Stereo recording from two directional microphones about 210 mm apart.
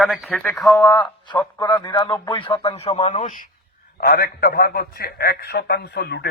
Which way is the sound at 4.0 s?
45° left (ahead or behind).